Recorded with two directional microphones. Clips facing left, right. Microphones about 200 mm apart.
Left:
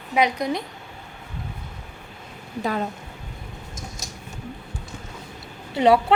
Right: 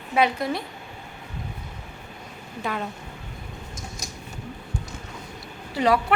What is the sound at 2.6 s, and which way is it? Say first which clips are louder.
Speech: left 4 dB; 35° left (ahead or behind).